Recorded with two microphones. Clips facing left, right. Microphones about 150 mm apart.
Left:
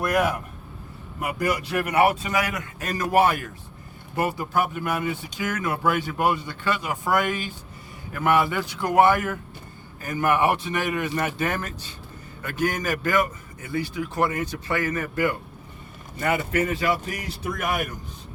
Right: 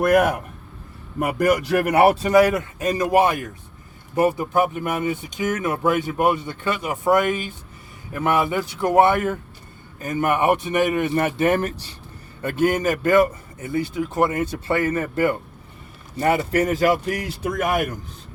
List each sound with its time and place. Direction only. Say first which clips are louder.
0.0 s a man's voice: right 6 dB; 55° right (ahead or behind); by 2.6 s 30° right (ahead or behind)
2.7 s a man's voice: right 1 dB; 20° right (ahead or behind); by 17.9 s 50° right (ahead or behind)